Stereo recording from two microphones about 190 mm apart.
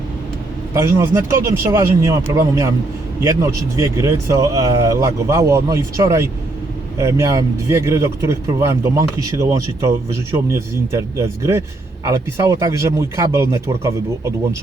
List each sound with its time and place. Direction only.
0.7 s speech: 15° right (ahead or behind)